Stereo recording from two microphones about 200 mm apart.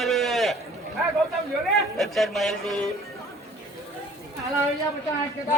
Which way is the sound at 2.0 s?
Centre (ahead or behind).